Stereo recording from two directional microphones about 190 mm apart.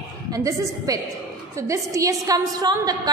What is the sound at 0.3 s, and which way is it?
A woman's voice, 20° right (ahead or behind).